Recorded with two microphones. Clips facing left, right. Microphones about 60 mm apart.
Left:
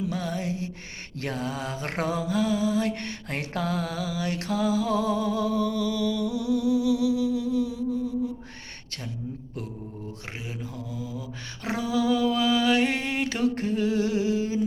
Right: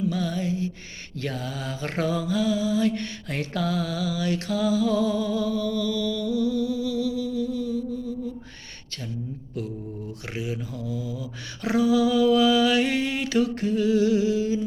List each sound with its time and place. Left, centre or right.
0.1 s music: left
1.1 s mantra: left
5.5 s a sound: right
6.0 s humming: centre
10.9 s mantra: left